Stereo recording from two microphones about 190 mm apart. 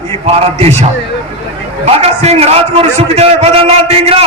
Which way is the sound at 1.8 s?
35° right (ahead or behind).